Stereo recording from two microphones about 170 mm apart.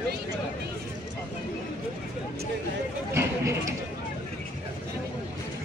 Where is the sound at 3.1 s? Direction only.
15° right (ahead or behind).